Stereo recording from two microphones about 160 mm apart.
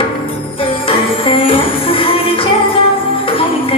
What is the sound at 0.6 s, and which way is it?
Music, 35° left (ahead or behind).